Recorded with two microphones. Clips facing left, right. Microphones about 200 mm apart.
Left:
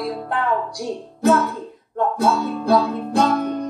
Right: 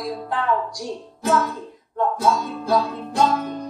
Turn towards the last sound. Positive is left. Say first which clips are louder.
# left 2 dB
turn(degrees=60)  # may be behind; listen again after turning